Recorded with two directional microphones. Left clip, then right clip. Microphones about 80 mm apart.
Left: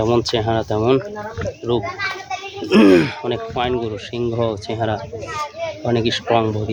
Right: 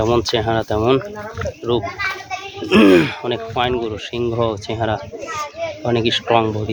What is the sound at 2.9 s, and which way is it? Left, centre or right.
Speech, left.